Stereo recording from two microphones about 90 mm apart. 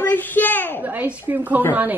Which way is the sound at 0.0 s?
20° left (ahead or behind).